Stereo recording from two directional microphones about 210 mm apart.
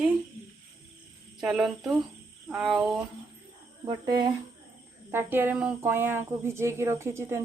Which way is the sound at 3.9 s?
20° right (ahead or behind).